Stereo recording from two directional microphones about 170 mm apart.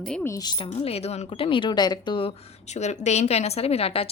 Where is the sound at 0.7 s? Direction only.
40° left (ahead or behind).